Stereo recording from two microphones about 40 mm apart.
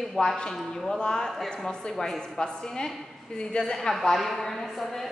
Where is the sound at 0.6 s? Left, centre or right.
Centre.